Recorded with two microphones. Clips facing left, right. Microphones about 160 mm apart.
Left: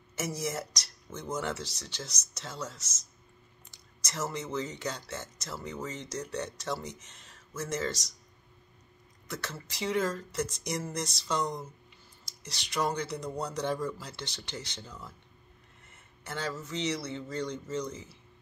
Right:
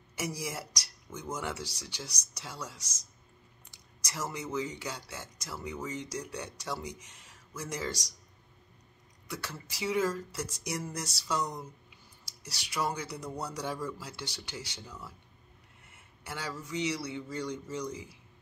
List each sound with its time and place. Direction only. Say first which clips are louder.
0.1 s speech: left 3 dB; 10° right (ahead or behind)
9.3 s speech: left 1 dB; 10° right (ahead or behind)